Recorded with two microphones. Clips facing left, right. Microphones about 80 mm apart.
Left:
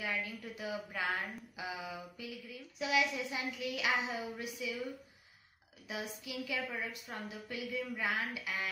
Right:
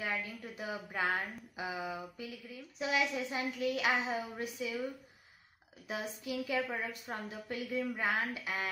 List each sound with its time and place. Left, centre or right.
0.0 s a sound: right
0.8 s a woman's voice: right
5.9 s a woman's voice: right